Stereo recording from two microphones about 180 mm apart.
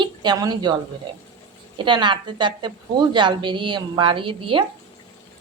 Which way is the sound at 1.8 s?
25° right (ahead or behind).